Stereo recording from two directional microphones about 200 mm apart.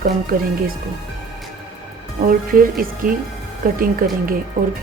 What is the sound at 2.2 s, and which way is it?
Speech, 45° right (ahead or behind).